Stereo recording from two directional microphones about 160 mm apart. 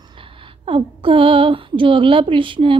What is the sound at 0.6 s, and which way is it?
Speech, 35° right (ahead or behind).